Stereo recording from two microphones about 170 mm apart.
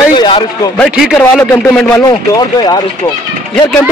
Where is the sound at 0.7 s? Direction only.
5° left (ahead or behind).